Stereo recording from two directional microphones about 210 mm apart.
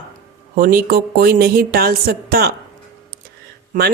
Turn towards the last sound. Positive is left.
turn(degrees=-40)  # may be behind; listen again after turning